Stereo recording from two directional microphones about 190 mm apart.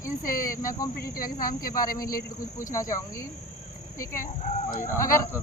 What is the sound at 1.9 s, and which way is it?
Speech, 20° left (ahead or behind).